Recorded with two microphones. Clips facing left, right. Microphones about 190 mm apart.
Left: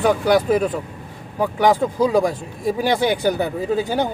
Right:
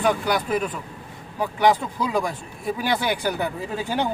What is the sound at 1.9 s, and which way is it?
Speech, 40° left (ahead or behind).